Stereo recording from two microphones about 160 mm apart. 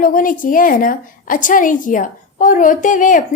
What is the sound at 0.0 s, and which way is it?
A woman's voice, 60° left (ahead or behind).